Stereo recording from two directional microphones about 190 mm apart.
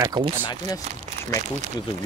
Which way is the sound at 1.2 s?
40° right (ahead or behind).